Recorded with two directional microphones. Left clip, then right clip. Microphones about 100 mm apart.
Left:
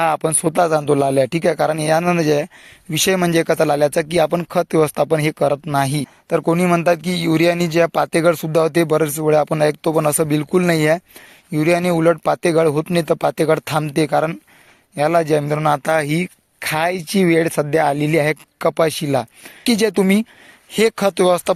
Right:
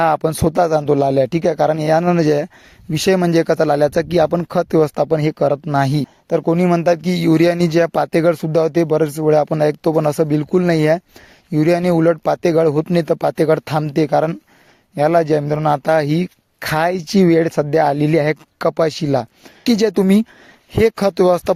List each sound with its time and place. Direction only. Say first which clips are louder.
0.0 s speech: right 2 dB; 70° right (ahead or behind)
1.4 s speech: right 1 dB; 45° right (ahead or behind)
5.3 s speech: right 1 dB; 70° right (ahead or behind); by 6.1 s 90° right
6.2 s speech: right 1 dB; 50° right (ahead or behind); by 7.1 s 70° right (ahead or behind)
8.0 s speech: even; 85° right
8.5 s speech: even; 45° right (ahead or behind)
9.1 s speech: right 1 dB; 60° right (ahead or behind)
11.5 s speech: right 1 dB; 90° right
12.4 s speech: right 1 dB; 65° right (ahead or behind)
14.9 s speech: right 2 dB; 65° right (ahead or behind)
15.4 s speech: right 1 dB; 45° right (ahead or behind)
16.6 s speech: right 2 dB; 90° right
20.7 s speech: right 1 dB; 90° right